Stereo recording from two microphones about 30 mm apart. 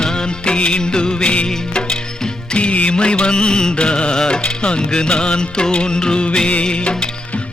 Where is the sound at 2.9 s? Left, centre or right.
Left.